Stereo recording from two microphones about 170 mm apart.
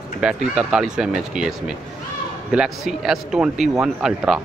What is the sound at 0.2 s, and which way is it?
Speech, 5° right (ahead or behind).